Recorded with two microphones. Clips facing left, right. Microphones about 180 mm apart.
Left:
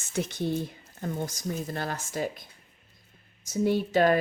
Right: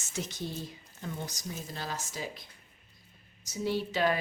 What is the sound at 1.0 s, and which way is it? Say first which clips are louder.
A woman's voice: left 7 dB; 50° left (ahead or behind).